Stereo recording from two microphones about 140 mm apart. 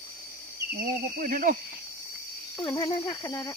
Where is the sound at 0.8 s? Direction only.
85° right.